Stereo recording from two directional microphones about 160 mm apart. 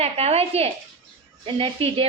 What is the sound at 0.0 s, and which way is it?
A woman's voice, 40° right (ahead or behind).